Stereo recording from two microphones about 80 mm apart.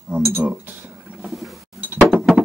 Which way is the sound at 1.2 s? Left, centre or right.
Centre.